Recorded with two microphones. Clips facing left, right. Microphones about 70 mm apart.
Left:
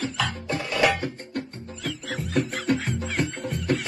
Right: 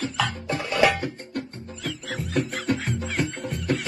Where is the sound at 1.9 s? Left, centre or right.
Centre.